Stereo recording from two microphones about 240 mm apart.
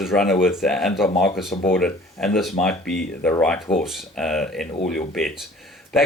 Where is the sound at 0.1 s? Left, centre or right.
Centre.